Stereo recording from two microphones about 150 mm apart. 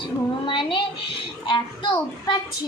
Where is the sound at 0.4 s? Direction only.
35° left (ahead or behind).